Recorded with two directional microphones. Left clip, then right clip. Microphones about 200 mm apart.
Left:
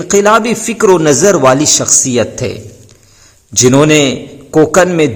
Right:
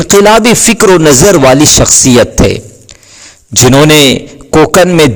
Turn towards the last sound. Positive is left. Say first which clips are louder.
# right 4 dB
turn(degrees=-35)  # may be behind; listen again after turning